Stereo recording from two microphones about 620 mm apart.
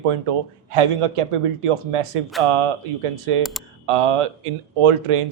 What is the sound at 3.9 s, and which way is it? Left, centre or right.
A man's voice, right.